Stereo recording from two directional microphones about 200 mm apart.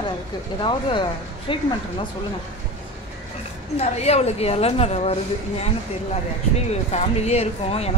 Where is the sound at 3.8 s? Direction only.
30° left (ahead or behind).